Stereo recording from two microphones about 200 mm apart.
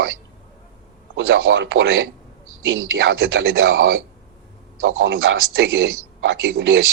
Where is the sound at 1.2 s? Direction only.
80° right.